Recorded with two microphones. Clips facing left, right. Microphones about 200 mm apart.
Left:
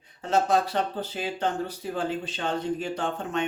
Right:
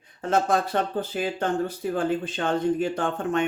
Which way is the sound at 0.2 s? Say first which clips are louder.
Right 1 dB; 50° right (ahead or behind).